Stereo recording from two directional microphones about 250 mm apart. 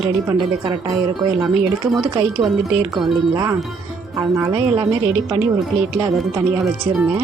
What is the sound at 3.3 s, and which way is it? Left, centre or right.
A woman's voice, centre.